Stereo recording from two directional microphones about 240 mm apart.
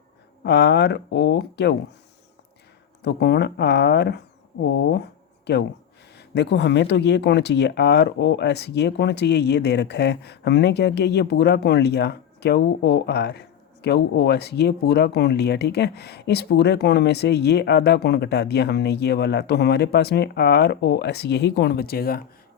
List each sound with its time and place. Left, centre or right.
0.4 s speech: left
3.0 s speech: left